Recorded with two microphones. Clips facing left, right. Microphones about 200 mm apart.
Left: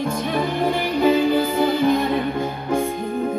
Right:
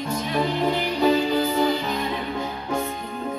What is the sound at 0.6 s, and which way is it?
Music, 50° left (ahead or behind).